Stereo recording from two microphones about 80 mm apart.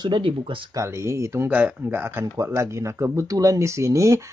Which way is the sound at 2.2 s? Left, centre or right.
Right.